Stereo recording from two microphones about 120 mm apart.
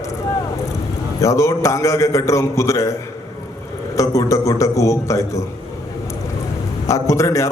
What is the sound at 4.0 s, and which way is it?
A man's voice, 25° left (ahead or behind).